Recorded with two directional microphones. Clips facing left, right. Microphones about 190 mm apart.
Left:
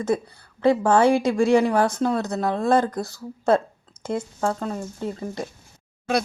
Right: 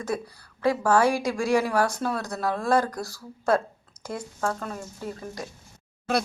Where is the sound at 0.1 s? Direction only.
20° left (ahead or behind).